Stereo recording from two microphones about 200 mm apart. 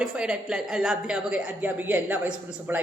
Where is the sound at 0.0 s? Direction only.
5° right (ahead or behind).